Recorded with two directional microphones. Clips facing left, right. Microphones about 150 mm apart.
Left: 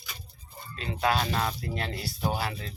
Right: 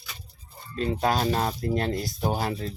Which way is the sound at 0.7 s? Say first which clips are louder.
Right 3 dB; 40° right (ahead or behind).